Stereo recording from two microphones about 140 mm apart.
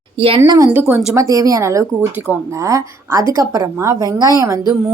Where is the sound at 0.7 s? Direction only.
10° right (ahead or behind).